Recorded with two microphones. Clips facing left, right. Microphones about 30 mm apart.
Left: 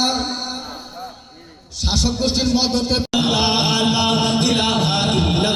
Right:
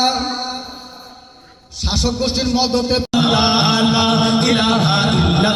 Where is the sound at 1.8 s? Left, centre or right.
Centre.